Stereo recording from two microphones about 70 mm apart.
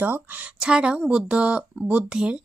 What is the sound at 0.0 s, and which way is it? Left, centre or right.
Speech, right.